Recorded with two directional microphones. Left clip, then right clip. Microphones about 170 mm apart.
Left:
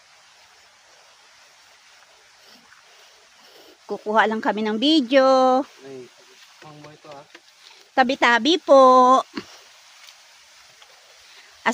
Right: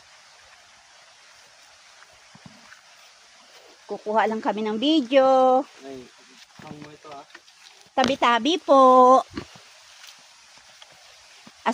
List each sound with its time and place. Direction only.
3.8 s speech: 45° left (ahead or behind)
7.9 s speech: 45° left (ahead or behind); by 9.4 s 25° left (ahead or behind)
11.6 s a sound: 35° left (ahead or behind)